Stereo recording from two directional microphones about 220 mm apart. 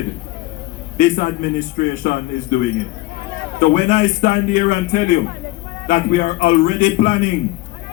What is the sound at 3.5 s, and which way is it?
A man's voice, 40° left (ahead or behind).